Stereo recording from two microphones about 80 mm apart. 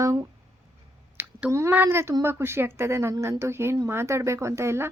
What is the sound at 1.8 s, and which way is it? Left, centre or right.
A woman's voice, right.